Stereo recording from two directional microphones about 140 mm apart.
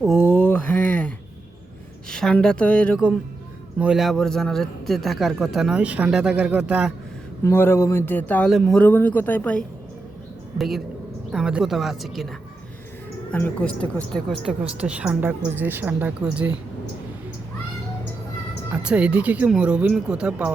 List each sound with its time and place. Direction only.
0.3 s a sound: 10° left (ahead or behind)
2.0 s speech: 5° left (ahead or behind)
3.8 s speech: 5° right (ahead or behind)
7.4 s speech: 15° left (ahead or behind)
8.4 s speech: centre (ahead or behind)
10.6 s speech: centre (ahead or behind)
13.3 s speech: 10° left (ahead or behind); by 16.6 s 10° right (ahead or behind)
18.7 s speech: 5° right (ahead or behind)